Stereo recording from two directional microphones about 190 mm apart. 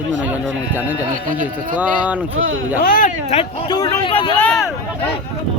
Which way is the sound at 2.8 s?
45° left (ahead or behind).